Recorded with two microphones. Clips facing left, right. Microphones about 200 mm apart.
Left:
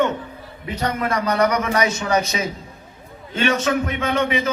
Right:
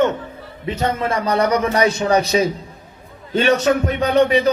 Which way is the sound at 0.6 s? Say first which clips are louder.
Right 3 dB; 25° right (ahead or behind).